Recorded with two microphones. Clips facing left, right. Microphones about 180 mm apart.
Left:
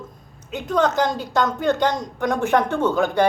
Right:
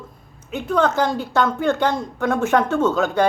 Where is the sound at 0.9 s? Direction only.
15° left (ahead or behind).